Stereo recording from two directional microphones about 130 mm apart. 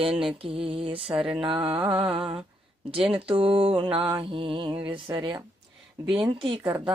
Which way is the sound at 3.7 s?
40° right (ahead or behind).